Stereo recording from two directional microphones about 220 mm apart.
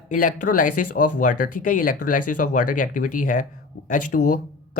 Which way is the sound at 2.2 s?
90° left.